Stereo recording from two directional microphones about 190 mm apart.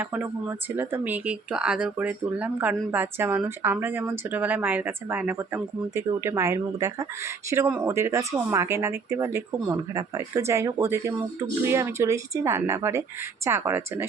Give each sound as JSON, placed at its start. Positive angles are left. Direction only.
{"t": 0.0, "sound": "speech", "side_deg": -10}